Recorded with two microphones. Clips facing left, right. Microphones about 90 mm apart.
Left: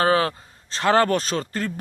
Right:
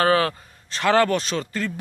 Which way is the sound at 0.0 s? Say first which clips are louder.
Even; 25° left (ahead or behind).